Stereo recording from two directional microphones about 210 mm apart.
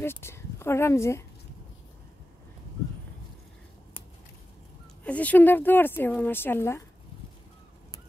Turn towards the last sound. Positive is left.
turn(degrees=10)  # may be behind; listen again after turning